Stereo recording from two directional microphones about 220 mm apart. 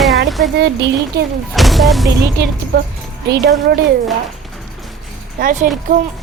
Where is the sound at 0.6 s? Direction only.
50° right (ahead or behind).